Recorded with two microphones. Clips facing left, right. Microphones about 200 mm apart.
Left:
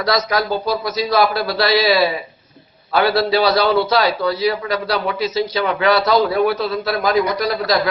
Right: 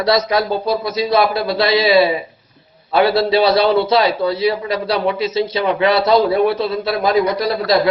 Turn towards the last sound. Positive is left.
turn(degrees=-30)  # may be behind; listen again after turning